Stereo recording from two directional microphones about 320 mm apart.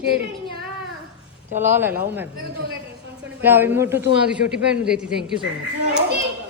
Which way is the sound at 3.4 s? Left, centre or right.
Centre.